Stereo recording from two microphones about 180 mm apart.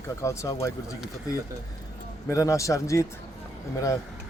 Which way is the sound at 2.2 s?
15° left (ahead or behind).